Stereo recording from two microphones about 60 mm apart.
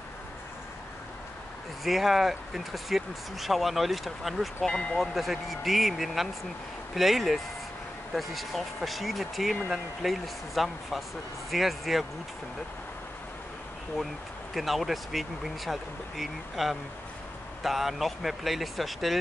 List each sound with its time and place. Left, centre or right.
1.9 s speech: centre
4.6 s speech: centre
5.0 s speech: centre
14.5 s speech: centre